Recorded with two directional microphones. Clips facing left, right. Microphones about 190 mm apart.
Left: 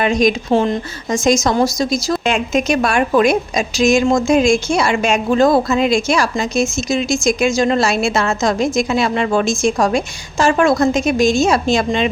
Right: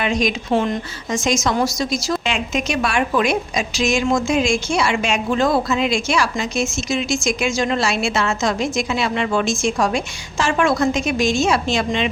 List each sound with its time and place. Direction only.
0.0 s a woman's voice: 45° left (ahead or behind)